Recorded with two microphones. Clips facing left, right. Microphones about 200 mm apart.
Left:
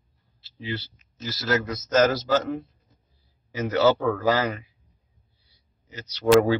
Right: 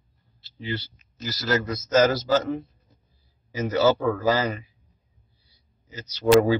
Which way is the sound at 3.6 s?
Centre (ahead or behind).